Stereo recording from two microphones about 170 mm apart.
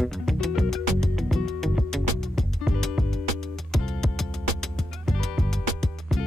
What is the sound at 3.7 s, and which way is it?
Music, centre (ahead or behind).